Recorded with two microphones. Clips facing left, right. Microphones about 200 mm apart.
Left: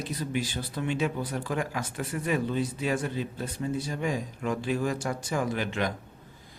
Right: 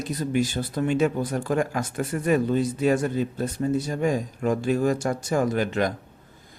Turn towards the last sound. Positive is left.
turn(degrees=-45)  # may be behind; listen again after turning